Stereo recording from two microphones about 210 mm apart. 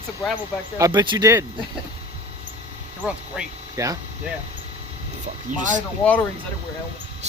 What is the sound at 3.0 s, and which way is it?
Speech, 10° right (ahead or behind).